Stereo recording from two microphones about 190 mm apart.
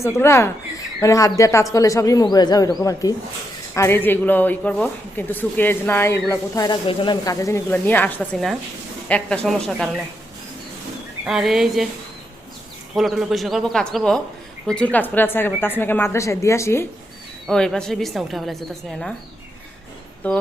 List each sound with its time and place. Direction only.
0.0 s a woman's voice: 15° left (ahead or behind)
11.3 s a woman's voice: centre (ahead or behind)
12.9 s a woman's voice: centre (ahead or behind); by 16.8 s 15° left (ahead or behind)
17.4 s a woman's voice: centre (ahead or behind)
20.2 s speech: 10° left (ahead or behind)